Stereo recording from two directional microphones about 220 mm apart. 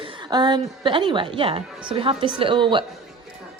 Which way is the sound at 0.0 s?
20° right (ahead or behind).